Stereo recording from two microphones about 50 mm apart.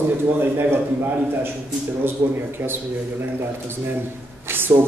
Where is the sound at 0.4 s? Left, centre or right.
Right.